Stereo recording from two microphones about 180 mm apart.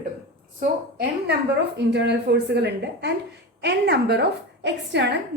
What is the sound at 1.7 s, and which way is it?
A woman's voice, 70° right (ahead or behind).